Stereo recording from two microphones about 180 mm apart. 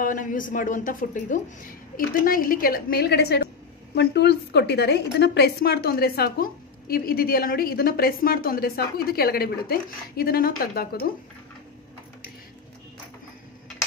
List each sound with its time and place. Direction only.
0.0 s a man's voice: 50° left (ahead or behind)